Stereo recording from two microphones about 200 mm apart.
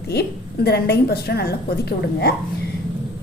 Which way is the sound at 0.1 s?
55° left (ahead or behind).